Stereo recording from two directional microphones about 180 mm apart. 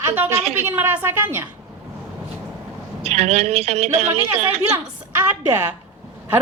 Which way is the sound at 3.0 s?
35° right (ahead or behind).